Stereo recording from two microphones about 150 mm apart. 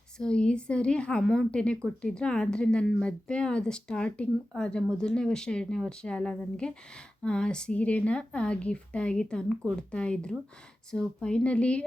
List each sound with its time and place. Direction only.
0.2 s a woman's voice: 5° left (ahead or behind)